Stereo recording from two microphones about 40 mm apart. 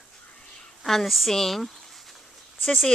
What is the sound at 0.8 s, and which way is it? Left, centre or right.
Speech, centre.